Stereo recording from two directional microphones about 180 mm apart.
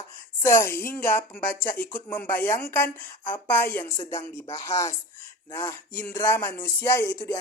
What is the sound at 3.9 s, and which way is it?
Speech, 20° left (ahead or behind).